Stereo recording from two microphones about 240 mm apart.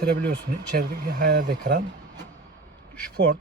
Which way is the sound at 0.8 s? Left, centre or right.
Right.